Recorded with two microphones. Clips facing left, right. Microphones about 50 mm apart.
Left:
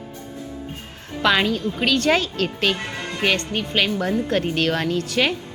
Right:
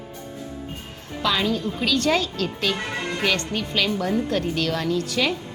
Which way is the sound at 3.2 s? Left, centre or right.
Left.